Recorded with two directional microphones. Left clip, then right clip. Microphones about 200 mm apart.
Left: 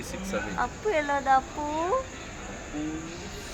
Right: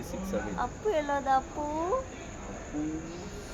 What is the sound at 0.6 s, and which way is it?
Speech, 10° left (ahead or behind).